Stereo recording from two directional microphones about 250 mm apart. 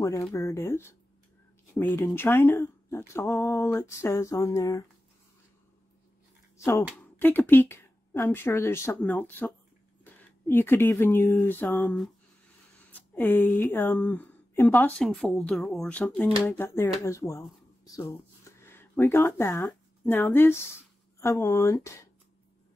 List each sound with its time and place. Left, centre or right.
0.0 s speech: centre
6.6 s a woman's voice: centre